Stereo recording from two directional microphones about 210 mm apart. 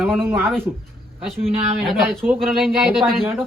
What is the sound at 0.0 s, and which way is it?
Speech, 5° right (ahead or behind).